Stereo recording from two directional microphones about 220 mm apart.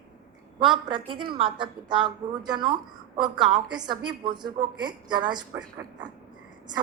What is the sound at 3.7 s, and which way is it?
A woman's voice, 20° right (ahead or behind).